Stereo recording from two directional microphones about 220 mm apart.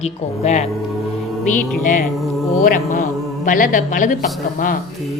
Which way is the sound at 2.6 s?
40° left (ahead or behind).